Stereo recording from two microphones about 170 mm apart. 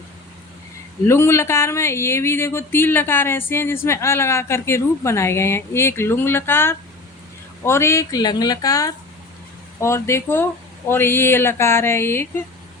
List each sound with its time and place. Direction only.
1.0 s speech: 15° left (ahead or behind)